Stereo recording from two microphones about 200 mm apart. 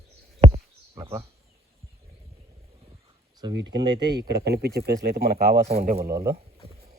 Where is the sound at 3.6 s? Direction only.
20° right (ahead or behind).